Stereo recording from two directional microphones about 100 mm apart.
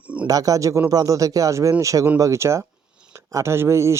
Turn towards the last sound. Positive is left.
turn(degrees=-30)  # may be behind; listen again after turning